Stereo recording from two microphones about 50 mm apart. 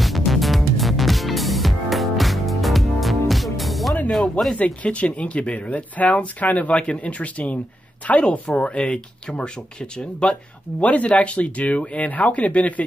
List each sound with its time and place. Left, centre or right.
0.0 s music: centre
4.1 s speech: centre
4.6 s speech: left